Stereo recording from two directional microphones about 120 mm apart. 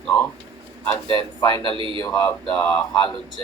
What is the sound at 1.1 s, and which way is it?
Speech, 35° left (ahead or behind).